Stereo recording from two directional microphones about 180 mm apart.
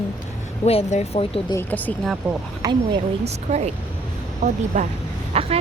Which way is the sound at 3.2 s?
40° right (ahead or behind).